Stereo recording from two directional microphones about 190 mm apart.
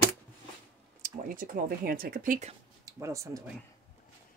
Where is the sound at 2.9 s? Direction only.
15° right (ahead or behind).